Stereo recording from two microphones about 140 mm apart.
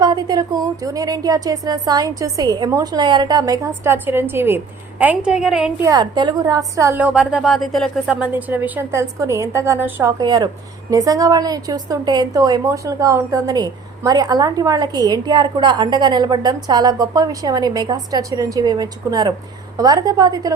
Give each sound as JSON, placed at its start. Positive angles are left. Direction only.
{"t": 0.0, "sound": "a woman's voice", "side_deg": -30}
{"t": 5.8, "sound": "a woman's voice", "side_deg": -30}
{"t": 7.0, "sound": "a woman's voice", "side_deg": -5}